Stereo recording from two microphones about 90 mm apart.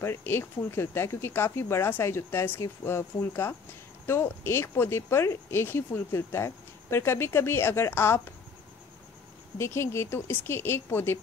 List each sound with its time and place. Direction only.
0.0 s speech: 25° left (ahead or behind)
9.6 s speech: 30° left (ahead or behind)